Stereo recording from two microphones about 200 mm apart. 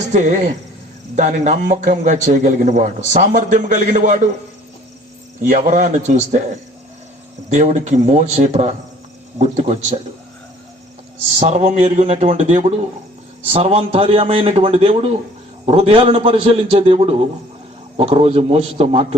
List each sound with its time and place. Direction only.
0.1 s a man's voice: 35° right (ahead or behind)
5.4 s a man's voice: 40° right (ahead or behind)
11.3 s a man's voice: 35° right (ahead or behind)